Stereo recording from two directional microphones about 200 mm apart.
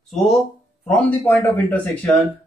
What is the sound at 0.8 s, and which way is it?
Speech, 5° left (ahead or behind).